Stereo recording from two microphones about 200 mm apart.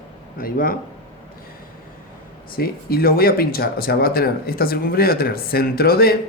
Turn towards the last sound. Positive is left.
turn(degrees=50)  # may be behind; listen again after turning